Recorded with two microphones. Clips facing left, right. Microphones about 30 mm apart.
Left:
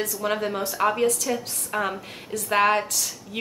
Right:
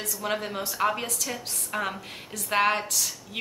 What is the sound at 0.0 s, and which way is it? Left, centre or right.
A woman's voice, centre.